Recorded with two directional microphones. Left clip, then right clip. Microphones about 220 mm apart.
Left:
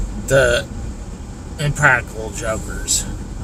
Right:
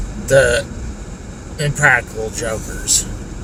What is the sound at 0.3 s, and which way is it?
Speech, 10° right (ahead or behind).